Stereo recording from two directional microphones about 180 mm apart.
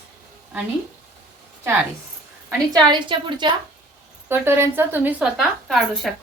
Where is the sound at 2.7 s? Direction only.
25° right (ahead or behind).